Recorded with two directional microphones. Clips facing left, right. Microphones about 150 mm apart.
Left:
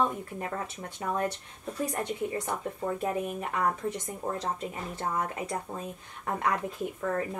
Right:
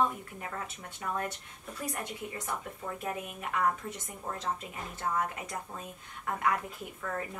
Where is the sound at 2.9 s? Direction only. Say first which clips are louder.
Left 7 dB; 35° left (ahead or behind).